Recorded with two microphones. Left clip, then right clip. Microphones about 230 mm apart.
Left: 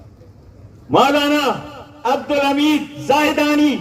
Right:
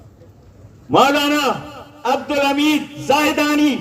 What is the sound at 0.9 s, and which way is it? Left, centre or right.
A man's voice, right.